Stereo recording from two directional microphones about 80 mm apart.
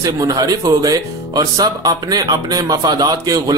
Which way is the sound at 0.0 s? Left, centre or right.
Right.